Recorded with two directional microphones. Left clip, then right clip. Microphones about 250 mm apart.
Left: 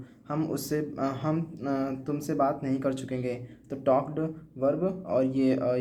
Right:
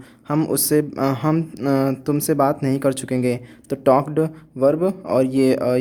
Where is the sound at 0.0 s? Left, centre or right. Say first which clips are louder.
Right 10 dB; right.